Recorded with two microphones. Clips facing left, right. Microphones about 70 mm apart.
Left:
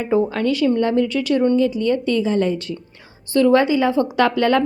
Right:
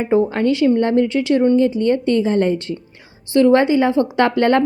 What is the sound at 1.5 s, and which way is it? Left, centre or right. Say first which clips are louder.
A woman's voice: right 2 dB; right.